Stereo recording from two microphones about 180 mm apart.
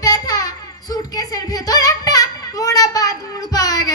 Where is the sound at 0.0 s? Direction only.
20° left (ahead or behind).